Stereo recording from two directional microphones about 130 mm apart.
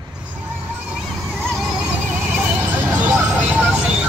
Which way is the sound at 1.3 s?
Centre (ahead or behind).